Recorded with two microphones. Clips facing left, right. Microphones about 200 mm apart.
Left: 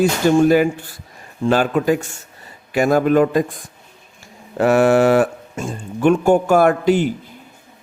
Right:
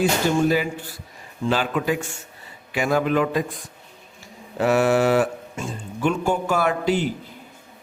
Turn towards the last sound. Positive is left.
turn(degrees=50)  # may be behind; listen again after turning